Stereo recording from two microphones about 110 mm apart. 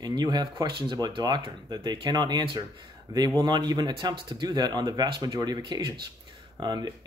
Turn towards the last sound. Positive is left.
turn(degrees=-40)  # may be behind; listen again after turning